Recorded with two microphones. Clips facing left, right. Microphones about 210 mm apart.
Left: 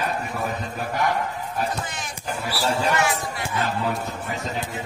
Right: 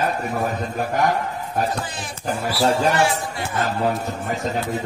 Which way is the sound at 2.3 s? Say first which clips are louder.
Right 6 dB; 45° right (ahead or behind).